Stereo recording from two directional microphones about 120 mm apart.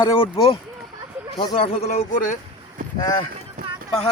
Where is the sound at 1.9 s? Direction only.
80° left.